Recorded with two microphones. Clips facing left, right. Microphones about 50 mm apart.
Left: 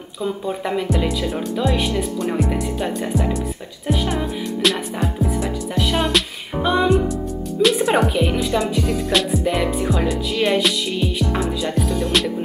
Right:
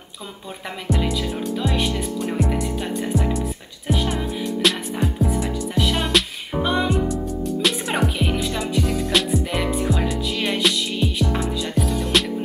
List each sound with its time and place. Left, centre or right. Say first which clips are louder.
0.8 s music: left 2 dB; centre